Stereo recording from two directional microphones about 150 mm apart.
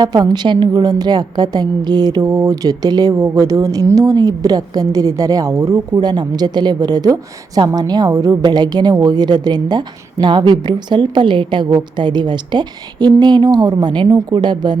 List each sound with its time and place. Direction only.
0.0 s a woman's voice: 30° right (ahead or behind)